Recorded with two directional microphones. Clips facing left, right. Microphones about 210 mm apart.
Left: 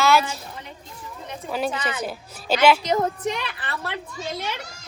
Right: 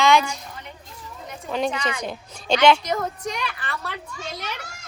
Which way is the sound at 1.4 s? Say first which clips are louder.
Right 1 dB; 5° left (ahead or behind).